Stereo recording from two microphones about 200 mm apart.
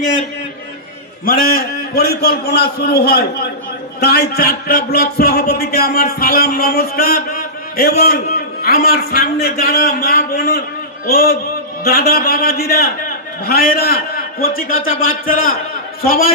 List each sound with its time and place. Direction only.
1.2 s a man's voice: 45° left (ahead or behind)